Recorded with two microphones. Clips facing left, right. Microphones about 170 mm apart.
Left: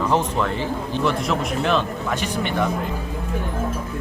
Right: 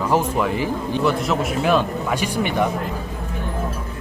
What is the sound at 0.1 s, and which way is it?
A man's voice, 10° right (ahead or behind).